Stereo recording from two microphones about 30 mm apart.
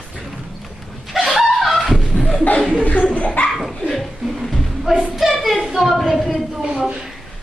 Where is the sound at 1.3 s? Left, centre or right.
Centre.